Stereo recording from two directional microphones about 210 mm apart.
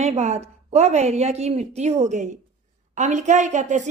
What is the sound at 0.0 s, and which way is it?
A woman's voice, 30° right (ahead or behind).